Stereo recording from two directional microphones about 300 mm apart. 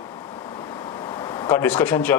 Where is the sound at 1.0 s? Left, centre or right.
Centre.